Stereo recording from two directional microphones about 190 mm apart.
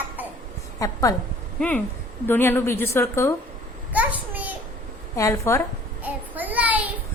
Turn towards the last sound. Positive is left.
turn(degrees=-10)  # may be behind; listen again after turning